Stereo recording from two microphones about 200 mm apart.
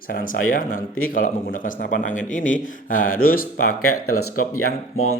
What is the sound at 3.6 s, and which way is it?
Speech, 90° left.